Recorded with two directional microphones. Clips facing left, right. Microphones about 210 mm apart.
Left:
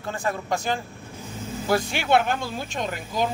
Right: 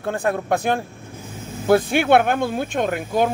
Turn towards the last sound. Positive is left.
turn(degrees=-55)  # may be behind; listen again after turning